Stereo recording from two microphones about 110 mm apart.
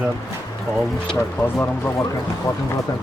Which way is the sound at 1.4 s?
20° left (ahead or behind).